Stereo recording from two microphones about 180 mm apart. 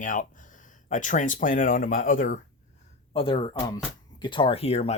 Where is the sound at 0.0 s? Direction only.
45° left (ahead or behind).